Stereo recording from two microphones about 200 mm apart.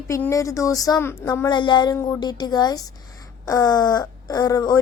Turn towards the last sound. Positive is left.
turn(degrees=20)  # may be behind; listen again after turning